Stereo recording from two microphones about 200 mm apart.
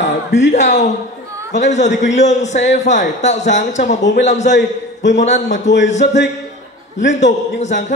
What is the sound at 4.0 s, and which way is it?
Speech, 65° left (ahead or behind).